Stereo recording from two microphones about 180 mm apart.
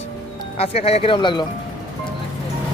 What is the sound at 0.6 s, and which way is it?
Speech, 35° left (ahead or behind).